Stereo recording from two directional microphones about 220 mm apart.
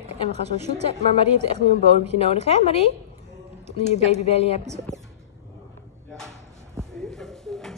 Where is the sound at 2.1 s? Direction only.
25° left (ahead or behind).